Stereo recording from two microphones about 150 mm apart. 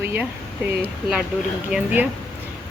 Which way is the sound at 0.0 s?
15° right (ahead or behind).